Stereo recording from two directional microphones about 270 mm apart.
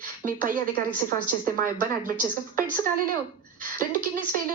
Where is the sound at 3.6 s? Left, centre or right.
Right.